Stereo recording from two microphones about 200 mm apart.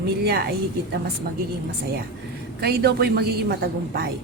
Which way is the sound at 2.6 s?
50° right (ahead or behind).